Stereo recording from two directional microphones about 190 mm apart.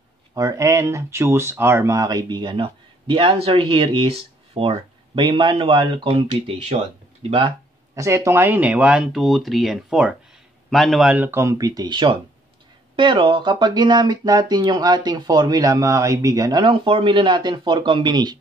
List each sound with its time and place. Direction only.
0.3 s speech: 20° right (ahead or behind)
7.9 s speech: 15° right (ahead or behind)